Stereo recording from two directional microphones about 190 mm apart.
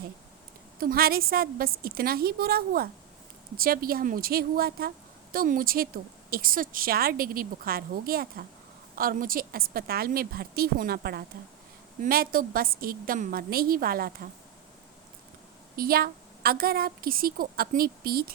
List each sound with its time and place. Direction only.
0.8 s a woman's voice: 50° right (ahead or behind)
15.7 s a woman's voice: 50° right (ahead or behind)